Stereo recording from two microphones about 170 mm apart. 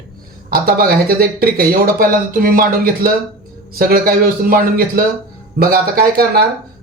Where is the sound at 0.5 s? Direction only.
65° right (ahead or behind).